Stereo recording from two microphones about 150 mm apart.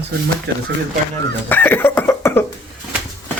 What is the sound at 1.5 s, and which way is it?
Cough, 15° left (ahead or behind).